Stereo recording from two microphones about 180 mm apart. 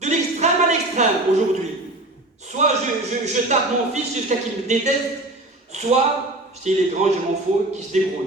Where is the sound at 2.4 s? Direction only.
40° right (ahead or behind).